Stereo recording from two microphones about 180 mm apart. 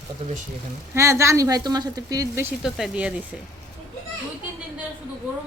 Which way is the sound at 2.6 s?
5° right (ahead or behind).